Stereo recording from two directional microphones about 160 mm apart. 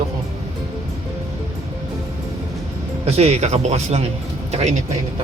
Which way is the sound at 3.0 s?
40° right (ahead or behind).